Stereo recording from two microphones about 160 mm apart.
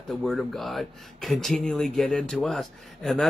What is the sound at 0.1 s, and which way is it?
Speech, centre (ahead or behind).